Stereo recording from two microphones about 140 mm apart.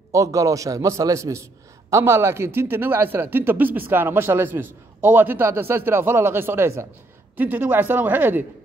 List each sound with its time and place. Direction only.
0.1 s a man's voice: 25° right (ahead or behind)